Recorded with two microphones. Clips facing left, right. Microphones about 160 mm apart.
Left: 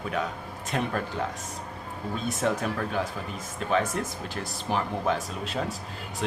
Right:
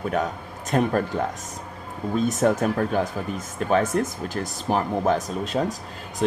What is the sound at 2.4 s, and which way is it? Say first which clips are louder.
Speech: right 5 dB; 45° right (ahead or behind).